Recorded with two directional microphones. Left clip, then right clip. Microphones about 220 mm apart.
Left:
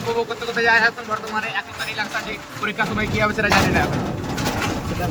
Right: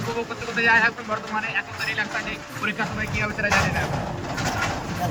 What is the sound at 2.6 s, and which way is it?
Speech, 30° left (ahead or behind).